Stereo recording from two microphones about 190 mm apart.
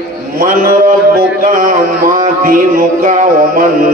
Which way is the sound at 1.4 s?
45° right (ahead or behind).